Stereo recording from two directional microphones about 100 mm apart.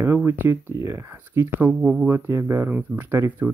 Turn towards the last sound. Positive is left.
turn(degrees=-20)  # may be behind; listen again after turning